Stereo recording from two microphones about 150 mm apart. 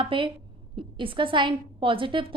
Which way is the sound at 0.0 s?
35° right (ahead or behind).